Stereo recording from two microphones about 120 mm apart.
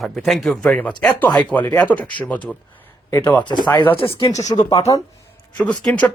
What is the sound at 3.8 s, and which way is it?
Speech, 20° left (ahead or behind).